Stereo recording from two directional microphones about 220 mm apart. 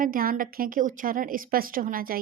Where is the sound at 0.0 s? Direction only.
40° right (ahead or behind).